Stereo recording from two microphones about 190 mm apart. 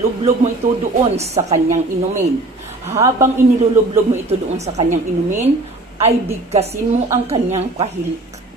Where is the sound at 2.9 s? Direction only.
15° right (ahead or behind).